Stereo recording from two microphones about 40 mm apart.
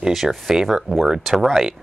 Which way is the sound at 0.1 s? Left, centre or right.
Centre.